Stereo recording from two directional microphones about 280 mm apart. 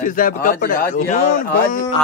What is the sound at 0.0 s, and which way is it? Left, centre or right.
Speech, left.